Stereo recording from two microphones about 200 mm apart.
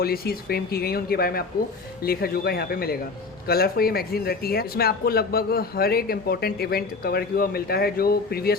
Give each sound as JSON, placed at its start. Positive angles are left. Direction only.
{"t": 0.0, "sound": "speech", "side_deg": 50}